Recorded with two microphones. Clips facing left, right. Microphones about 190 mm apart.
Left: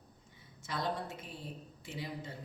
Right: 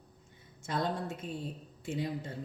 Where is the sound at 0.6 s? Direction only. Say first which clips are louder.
Right 4 dB; 50° right (ahead or behind).